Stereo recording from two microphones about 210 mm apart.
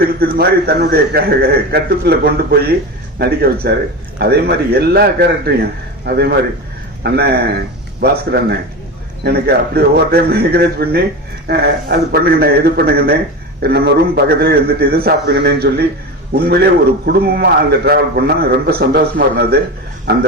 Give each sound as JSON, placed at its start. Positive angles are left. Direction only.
{"t": 0.2, "sound": "a man's voice", "side_deg": -45}
{"t": 17.1, "sound": "a man's voice", "side_deg": -50}